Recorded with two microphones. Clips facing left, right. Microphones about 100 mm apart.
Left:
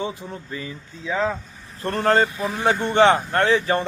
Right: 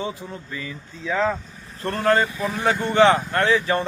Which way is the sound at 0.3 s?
25° left (ahead or behind).